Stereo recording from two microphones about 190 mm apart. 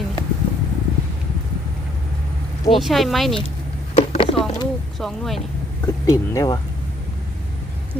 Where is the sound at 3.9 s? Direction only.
30° left (ahead or behind).